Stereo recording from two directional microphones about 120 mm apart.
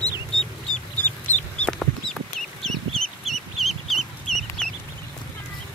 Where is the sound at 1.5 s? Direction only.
5° left (ahead or behind).